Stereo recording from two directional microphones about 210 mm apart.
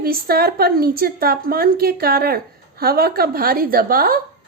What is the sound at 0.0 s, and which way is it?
A woman's voice, 45° right (ahead or behind).